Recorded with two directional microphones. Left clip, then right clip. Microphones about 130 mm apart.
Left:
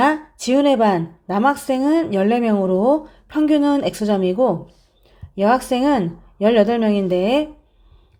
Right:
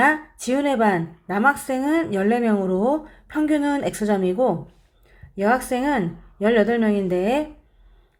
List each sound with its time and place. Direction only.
0.0 s speech: 25° left (ahead or behind)
5.4 s speech: 35° left (ahead or behind)